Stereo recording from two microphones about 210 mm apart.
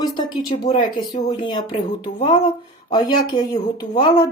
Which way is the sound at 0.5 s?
30° left (ahead or behind).